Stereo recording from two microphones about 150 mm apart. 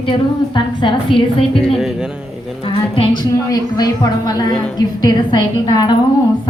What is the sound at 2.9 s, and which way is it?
Speech, 35° left (ahead or behind).